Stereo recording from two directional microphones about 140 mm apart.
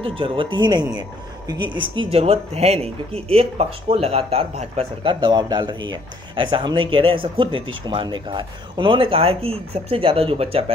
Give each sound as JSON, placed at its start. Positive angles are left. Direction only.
{"t": 0.0, "sound": "speech", "side_deg": -40}